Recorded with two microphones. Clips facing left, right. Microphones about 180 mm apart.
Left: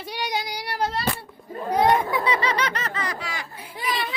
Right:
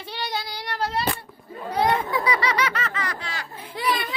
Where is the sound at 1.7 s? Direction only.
20° left (ahead or behind).